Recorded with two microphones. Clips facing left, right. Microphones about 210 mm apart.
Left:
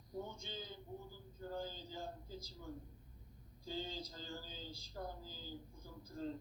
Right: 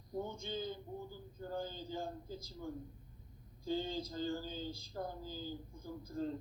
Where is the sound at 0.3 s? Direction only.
50° right (ahead or behind).